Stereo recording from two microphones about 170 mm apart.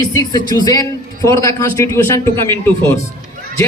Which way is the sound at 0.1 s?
20° left (ahead or behind).